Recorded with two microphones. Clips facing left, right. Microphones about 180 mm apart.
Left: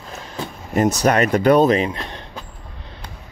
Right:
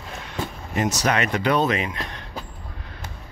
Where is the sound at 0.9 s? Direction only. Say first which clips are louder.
Left 6 dB; 45° left (ahead or behind).